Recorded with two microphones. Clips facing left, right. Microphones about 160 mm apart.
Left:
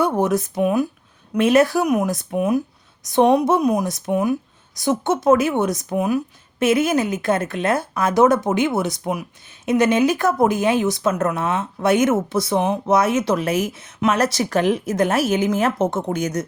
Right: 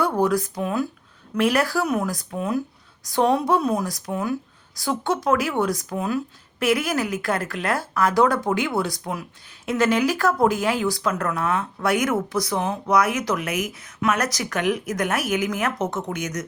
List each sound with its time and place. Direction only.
0.0 s speech: 20° left (ahead or behind)